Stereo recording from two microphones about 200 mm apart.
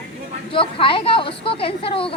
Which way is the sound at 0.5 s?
25° left (ahead or behind).